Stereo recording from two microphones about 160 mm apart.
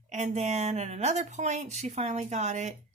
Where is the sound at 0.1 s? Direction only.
45° right (ahead or behind).